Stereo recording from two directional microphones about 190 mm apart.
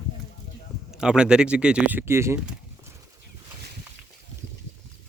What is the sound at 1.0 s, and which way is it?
Speech, 5° right (ahead or behind).